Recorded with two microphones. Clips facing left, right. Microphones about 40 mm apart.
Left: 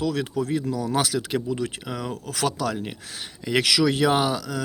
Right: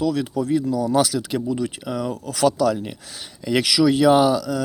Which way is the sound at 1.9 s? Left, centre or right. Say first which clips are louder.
Right 4 dB; left.